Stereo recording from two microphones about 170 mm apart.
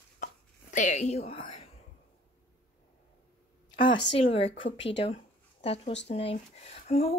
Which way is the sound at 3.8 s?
30° left (ahead or behind).